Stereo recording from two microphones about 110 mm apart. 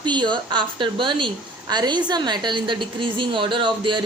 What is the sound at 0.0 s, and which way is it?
A woman's voice, 45° right (ahead or behind).